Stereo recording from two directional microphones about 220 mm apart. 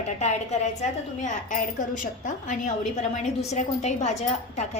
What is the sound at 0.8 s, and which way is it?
A woman's voice, 35° left (ahead or behind).